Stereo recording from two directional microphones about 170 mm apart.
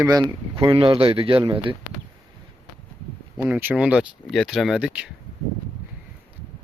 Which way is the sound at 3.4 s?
10° right (ahead or behind).